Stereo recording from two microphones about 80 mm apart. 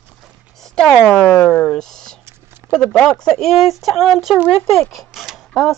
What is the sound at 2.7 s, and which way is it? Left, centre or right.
Speech, centre.